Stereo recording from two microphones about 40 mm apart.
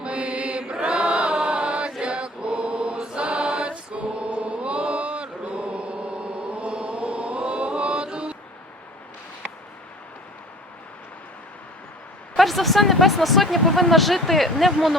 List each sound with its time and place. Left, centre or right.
0.0 s mantra: right
2.0 s choir: right
12.4 s speech: centre